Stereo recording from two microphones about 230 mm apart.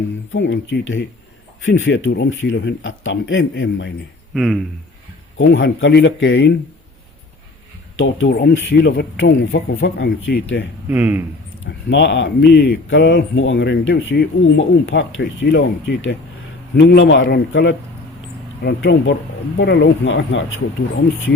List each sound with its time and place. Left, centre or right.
0.3 s speech: left
4.4 s speech: centre
5.4 s speech: left
7.9 s speech: left
10.8 s speech: centre
11.6 s speech: left